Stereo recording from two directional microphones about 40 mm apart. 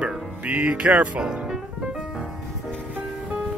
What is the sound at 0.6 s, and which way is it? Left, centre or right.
Music, right.